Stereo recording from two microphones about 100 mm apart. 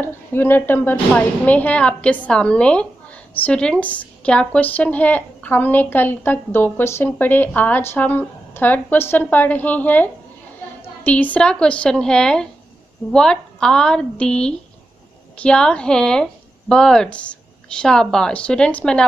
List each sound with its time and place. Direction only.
0.0 s speech: 25° left (ahead or behind)